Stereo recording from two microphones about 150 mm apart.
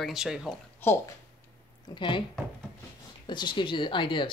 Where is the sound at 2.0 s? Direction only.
35° left (ahead or behind).